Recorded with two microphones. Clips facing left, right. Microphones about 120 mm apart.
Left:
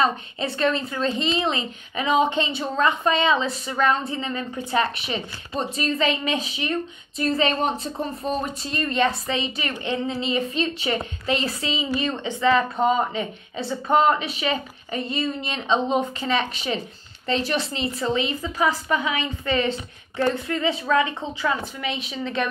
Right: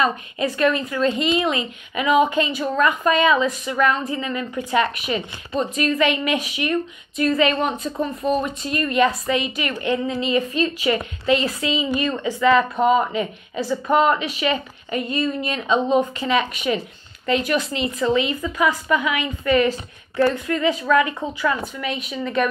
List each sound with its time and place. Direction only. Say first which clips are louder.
0.4 s a woman's voice: right 4 dB; 30° left (ahead or behind)